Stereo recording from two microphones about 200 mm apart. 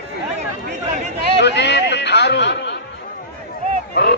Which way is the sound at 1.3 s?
60° left (ahead or behind).